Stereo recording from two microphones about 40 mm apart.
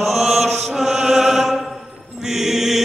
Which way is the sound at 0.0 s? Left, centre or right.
Centre.